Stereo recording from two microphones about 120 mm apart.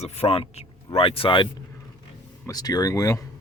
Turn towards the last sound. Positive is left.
turn(degrees=30)  # may be behind; listen again after turning